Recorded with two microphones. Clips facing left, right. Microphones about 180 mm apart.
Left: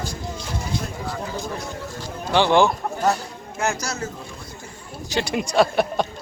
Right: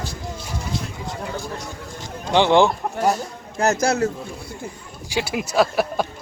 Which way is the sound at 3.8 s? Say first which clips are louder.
Right 10 dB; 60° right (ahead or behind).